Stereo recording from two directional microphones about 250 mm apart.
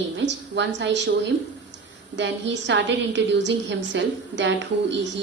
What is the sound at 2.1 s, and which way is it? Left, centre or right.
A woman's voice, right.